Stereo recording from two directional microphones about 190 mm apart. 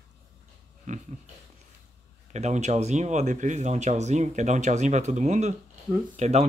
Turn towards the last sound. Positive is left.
turn(degrees=-35)  # may be behind; listen again after turning